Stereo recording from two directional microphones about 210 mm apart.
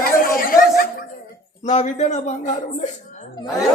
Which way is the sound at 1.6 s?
35° left (ahead or behind).